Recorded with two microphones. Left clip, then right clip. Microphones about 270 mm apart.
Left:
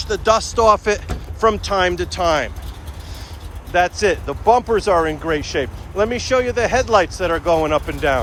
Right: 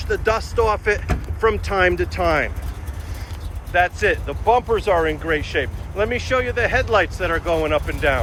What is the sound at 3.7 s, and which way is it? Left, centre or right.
Speech, centre.